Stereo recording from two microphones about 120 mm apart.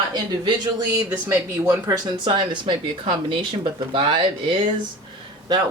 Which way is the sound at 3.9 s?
45° right (ahead or behind).